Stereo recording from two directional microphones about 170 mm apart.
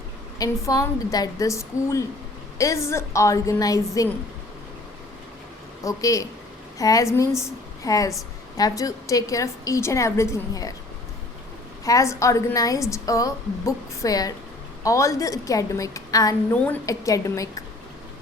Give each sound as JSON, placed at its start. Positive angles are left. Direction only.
{"t": 0.3, "sound": "a woman's voice", "side_deg": 20}
{"t": 5.8, "sound": "a woman's voice", "side_deg": 20}
{"t": 11.9, "sound": "a woman's voice", "side_deg": 20}